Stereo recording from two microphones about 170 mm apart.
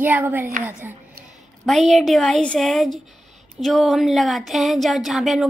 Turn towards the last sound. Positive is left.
turn(degrees=0)  # may be behind; listen again after turning